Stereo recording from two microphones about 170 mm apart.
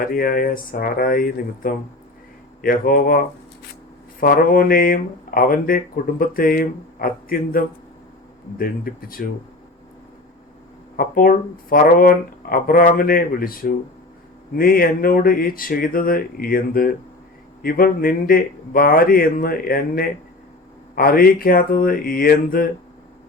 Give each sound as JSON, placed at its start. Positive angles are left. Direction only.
{"t": 0.0, "sound": "speech", "side_deg": 55}
{"t": 10.9, "sound": "speech", "side_deg": 60}